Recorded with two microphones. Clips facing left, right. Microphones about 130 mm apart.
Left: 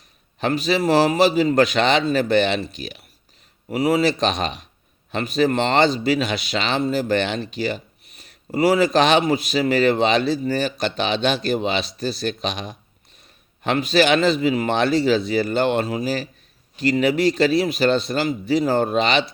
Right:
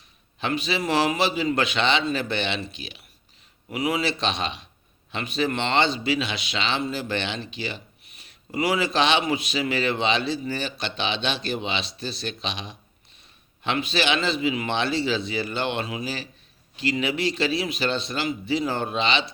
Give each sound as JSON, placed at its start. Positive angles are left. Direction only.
{"t": 0.3, "sound": "a man's voice", "side_deg": 40}